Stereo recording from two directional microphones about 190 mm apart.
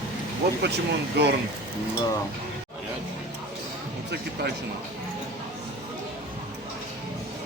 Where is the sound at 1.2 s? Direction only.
60° right (ahead or behind).